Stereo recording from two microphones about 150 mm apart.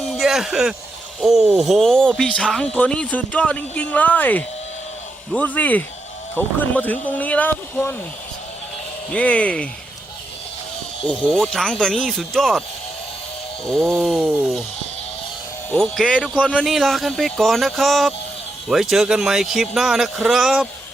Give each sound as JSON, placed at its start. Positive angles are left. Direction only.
{"t": 0.1, "sound": "a sound", "side_deg": 0}
{"t": 1.2, "sound": "speech", "side_deg": 0}
{"t": 9.0, "sound": "speech", "side_deg": 10}
{"t": 11.0, "sound": "a man's voice", "side_deg": 10}
{"t": 13.7, "sound": "a man's voice", "side_deg": 5}
{"t": 16.0, "sound": "speech", "side_deg": 5}
{"t": 16.2, "sound": "a man's voice", "side_deg": -5}